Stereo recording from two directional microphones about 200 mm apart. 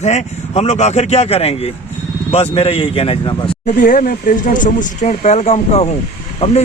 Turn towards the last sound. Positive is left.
turn(degrees=35)  # may be behind; listen again after turning